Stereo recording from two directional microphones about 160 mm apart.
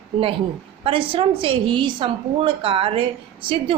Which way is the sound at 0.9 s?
35° right (ahead or behind).